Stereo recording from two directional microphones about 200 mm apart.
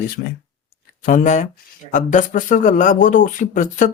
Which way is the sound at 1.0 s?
40° left (ahead or behind).